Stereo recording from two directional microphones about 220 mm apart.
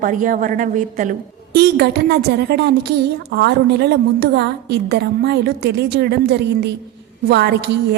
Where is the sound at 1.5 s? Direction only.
45° right (ahead or behind).